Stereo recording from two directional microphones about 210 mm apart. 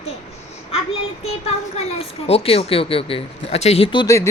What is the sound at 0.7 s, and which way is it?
Child singing, 30° left (ahead or behind).